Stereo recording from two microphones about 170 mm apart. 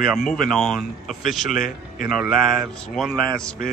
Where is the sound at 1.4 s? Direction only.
55° left (ahead or behind).